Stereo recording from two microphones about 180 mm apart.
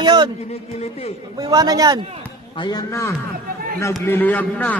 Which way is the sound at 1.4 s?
20° right (ahead or behind).